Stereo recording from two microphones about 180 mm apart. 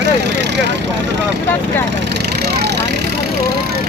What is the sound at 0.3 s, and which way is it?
Vehicle, 70° right (ahead or behind).